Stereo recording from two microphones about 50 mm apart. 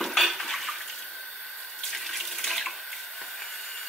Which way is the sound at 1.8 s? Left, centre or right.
Centre.